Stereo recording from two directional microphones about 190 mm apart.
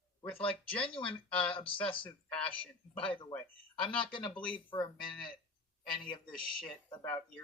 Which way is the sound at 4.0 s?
25° left (ahead or behind).